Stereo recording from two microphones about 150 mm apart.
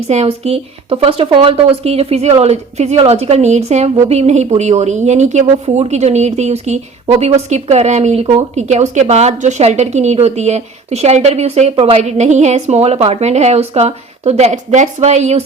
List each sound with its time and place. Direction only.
0.1 s speech: 45° right (ahead or behind)